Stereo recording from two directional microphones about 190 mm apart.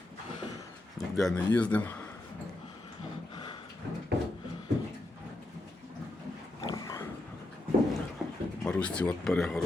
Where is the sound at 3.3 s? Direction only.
25° left (ahead or behind).